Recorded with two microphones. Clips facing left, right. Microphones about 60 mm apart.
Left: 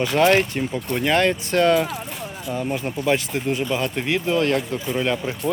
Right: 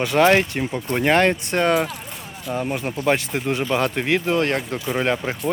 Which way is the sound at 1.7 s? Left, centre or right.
Centre.